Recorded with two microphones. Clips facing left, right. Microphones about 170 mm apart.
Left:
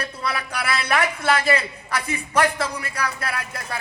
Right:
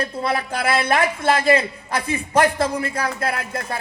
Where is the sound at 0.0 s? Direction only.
50° right (ahead or behind).